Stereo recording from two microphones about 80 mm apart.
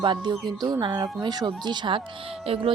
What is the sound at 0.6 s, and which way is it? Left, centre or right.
Speech, right.